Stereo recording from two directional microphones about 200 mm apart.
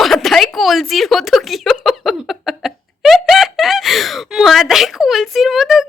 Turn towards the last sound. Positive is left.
turn(degrees=0)  # may be behind; listen again after turning